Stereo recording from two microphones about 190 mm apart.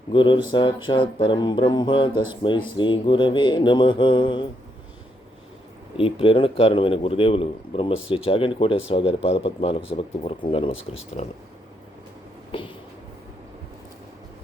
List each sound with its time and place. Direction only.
0.1 s speech: 25° left (ahead or behind)
6.0 s speech: 30° left (ahead or behind)
12.5 s a sound: 25° left (ahead or behind)